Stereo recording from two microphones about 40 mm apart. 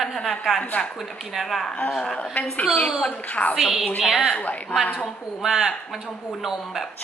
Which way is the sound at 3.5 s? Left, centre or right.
Centre.